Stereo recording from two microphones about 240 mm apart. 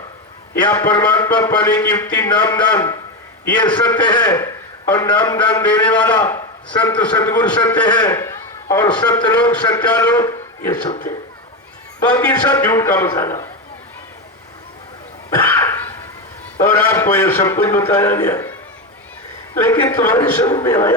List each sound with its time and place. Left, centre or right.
0.6 s a man's voice: centre
5.8 s a man's voice: centre
12.1 s a man's voice: centre
15.3 s cough: centre
16.6 s a man's voice: centre
19.5 s a man's voice: centre